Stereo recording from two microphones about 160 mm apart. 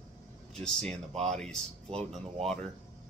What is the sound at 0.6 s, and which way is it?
Speech, 5° left (ahead or behind).